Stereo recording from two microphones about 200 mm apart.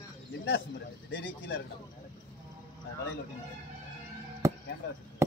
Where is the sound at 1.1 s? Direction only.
75° left (ahead or behind).